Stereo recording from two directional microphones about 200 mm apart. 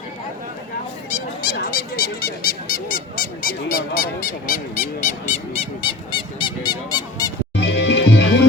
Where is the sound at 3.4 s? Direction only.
50° left (ahead or behind).